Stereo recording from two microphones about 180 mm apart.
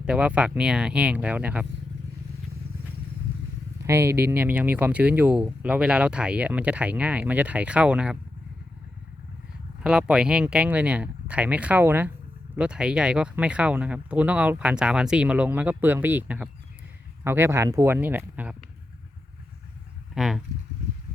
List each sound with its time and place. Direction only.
0.0 s speech: 5° right (ahead or behind)
3.8 s speech: 15° right (ahead or behind)
9.8 s speech: 5° right (ahead or behind)
20.1 s speech: centre (ahead or behind)